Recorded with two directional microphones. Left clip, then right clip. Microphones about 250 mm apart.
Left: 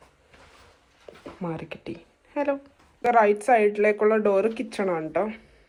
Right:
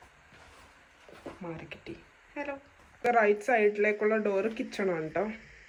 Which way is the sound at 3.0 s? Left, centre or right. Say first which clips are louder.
Left 6 dB; centre.